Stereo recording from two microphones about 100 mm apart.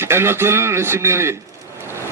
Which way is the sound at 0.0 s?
25° right (ahead or behind).